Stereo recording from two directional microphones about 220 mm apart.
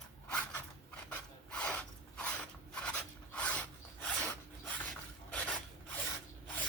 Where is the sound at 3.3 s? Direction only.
5° left (ahead or behind).